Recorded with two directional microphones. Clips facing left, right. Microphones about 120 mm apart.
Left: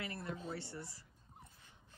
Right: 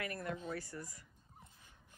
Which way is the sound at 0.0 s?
25° left (ahead or behind).